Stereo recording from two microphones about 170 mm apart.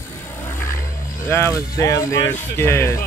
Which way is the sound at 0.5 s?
15° left (ahead or behind).